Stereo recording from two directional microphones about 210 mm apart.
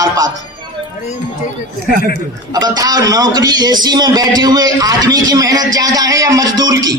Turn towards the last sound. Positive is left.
turn(degrees=-15)  # may be behind; listen again after turning